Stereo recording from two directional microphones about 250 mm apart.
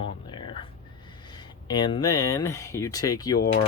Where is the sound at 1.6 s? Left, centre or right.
Centre.